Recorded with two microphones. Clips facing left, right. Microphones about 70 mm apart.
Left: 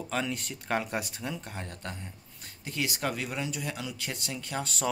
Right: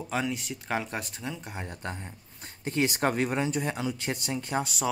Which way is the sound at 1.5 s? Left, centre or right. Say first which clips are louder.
Right 3 dB; centre.